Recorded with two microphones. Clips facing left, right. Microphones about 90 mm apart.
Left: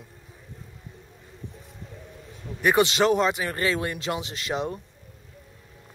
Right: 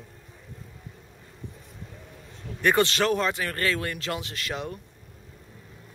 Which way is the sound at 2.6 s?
15° left (ahead or behind).